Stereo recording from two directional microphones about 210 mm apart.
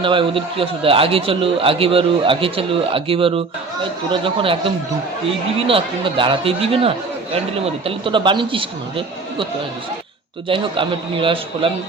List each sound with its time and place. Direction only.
0.0 s a man's voice: 25° right (ahead or behind)
10.5 s a man's voice: 25° right (ahead or behind)